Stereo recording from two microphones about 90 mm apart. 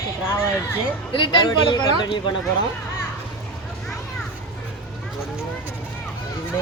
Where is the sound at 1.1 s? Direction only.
60° left (ahead or behind).